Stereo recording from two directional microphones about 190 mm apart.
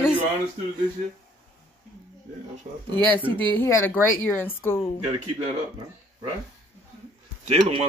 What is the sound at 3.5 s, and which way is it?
Speech, 10° left (ahead or behind).